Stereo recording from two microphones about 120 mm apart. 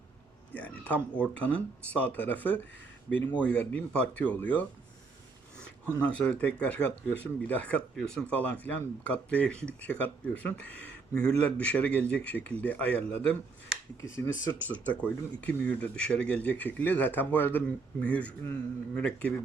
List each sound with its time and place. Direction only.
0.5 s a sound: 10° left (ahead or behind)
1.4 s speech: 10° left (ahead or behind)
5.8 s speech: 10° left (ahead or behind)
14.7 s speech: 15° left (ahead or behind)